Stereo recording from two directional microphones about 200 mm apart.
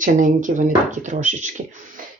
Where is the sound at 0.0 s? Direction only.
40° right (ahead or behind).